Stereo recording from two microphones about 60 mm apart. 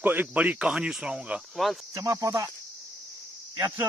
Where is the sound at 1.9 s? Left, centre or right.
Right.